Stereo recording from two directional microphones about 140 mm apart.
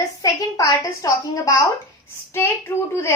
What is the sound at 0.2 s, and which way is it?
A woman's voice, 25° left (ahead or behind).